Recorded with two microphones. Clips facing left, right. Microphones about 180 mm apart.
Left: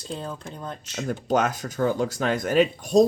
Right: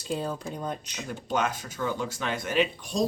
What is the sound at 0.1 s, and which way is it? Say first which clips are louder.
Speech: right 3 dB; 5° right (ahead or behind).